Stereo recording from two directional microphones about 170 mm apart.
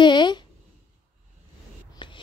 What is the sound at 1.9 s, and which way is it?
Whispering, 30° left (ahead or behind).